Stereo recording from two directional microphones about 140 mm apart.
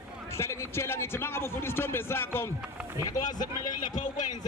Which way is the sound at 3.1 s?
30° left (ahead or behind).